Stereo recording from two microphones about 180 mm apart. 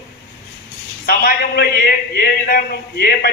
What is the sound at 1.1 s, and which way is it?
Speech, 55° left (ahead or behind).